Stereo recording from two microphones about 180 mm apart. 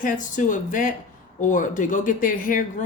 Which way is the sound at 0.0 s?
45° left (ahead or behind).